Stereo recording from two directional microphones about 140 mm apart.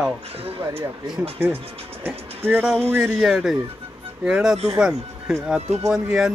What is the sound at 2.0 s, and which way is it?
Music, 15° right (ahead or behind).